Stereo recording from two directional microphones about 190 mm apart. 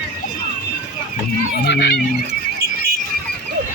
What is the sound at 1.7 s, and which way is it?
Speech, 60° left (ahead or behind).